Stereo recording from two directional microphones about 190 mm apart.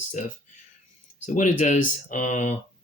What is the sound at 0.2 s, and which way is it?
Speech, 40° left (ahead or behind).